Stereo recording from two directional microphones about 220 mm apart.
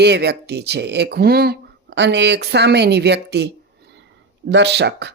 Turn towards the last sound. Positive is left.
turn(degrees=-50)  # may be behind; listen again after turning